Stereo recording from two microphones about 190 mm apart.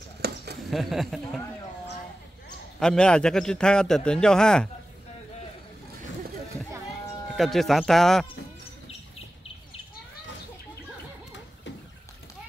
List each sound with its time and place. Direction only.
0.2 s a sound: 60° right (ahead or behind)
0.7 s a man's voice: centre (ahead or behind)
2.8 s a man's voice: 5° left (ahead or behind)
7.3 s a man's voice: centre (ahead or behind)